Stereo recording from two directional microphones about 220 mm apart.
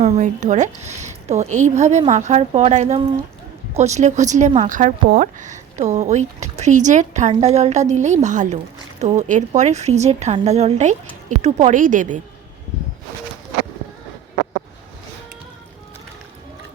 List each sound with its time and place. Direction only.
0.0 s speech: 30° right (ahead or behind)